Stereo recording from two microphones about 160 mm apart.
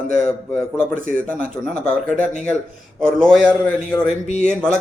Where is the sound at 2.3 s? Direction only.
45° left (ahead or behind).